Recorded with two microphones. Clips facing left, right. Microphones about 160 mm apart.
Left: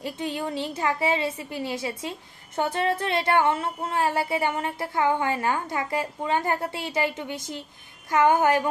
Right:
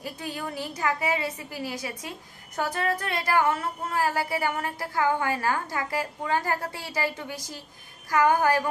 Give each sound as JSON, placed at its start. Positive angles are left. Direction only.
{"t": 0.0, "sound": "a woman's voice", "side_deg": 25}